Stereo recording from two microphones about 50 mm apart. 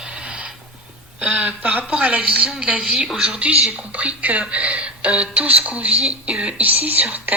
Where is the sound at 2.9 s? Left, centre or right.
Centre.